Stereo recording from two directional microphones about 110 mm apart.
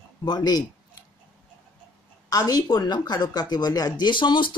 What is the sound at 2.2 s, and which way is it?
Speech, 35° left (ahead or behind).